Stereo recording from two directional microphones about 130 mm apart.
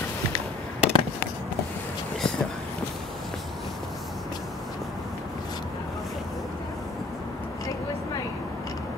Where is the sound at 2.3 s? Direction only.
5° left (ahead or behind).